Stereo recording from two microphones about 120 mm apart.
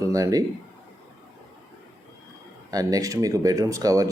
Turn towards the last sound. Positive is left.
turn(degrees=-30)  # may be behind; listen again after turning